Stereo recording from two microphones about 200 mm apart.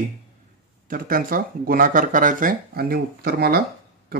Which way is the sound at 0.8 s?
45° right (ahead or behind).